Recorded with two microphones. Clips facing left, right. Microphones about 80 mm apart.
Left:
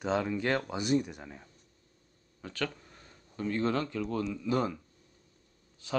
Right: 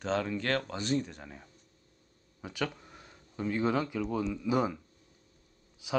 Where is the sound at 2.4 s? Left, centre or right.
Centre.